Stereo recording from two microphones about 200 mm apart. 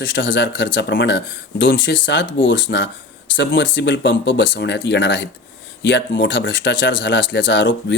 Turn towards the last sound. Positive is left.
turn(degrees=65)  # may be behind; listen again after turning